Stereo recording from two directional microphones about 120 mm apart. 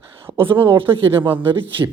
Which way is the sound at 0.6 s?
45° right (ahead or behind).